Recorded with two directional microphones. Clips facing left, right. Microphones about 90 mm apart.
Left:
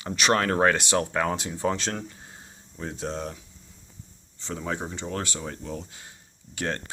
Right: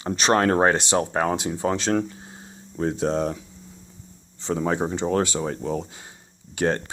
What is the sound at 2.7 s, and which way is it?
Speech, 50° right (ahead or behind).